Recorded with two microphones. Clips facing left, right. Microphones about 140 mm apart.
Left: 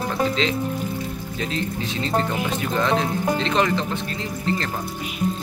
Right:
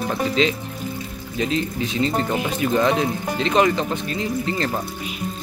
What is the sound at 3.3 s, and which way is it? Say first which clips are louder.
Speech: right 5 dB; 10° right (ahead or behind).